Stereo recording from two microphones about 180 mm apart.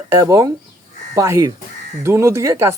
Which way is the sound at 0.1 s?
20° right (ahead or behind).